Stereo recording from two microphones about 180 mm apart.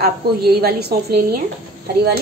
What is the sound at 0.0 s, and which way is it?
A woman's voice, 60° right (ahead or behind).